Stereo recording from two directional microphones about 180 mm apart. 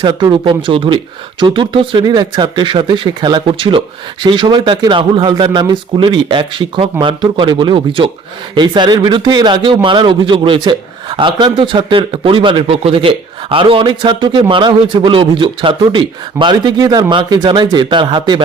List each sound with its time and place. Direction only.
0.0 s a man's voice: 25° right (ahead or behind)